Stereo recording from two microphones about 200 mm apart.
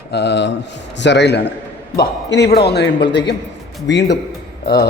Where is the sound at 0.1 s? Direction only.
60° left (ahead or behind).